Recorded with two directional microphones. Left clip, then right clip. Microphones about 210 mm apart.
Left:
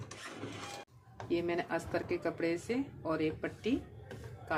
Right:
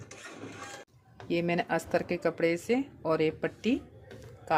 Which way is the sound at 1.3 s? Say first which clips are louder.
Right 5 dB; 55° right (ahead or behind).